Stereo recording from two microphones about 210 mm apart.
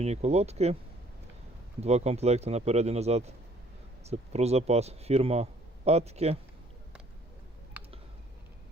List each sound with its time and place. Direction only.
0.0 s a man's voice: 30° right (ahead or behind)
1.8 s a man's voice: 30° right (ahead or behind)